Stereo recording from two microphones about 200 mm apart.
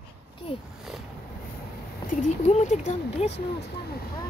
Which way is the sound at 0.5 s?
30° left (ahead or behind).